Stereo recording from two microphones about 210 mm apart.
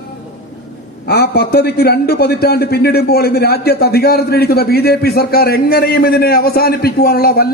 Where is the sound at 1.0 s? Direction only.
50° left (ahead or behind).